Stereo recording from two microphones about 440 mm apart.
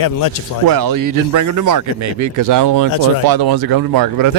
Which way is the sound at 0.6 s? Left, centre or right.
Right.